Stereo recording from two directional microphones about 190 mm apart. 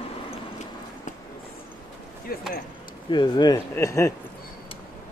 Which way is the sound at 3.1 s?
20° left (ahead or behind).